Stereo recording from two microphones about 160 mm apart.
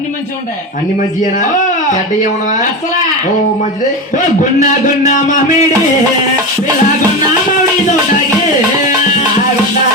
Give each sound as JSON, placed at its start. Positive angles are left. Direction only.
{"t": 1.2, "sound": "speech", "side_deg": 50}
{"t": 4.6, "sound": "a man's voice", "side_deg": 50}